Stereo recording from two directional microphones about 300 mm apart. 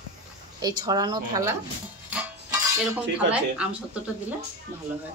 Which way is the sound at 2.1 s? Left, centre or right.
Centre.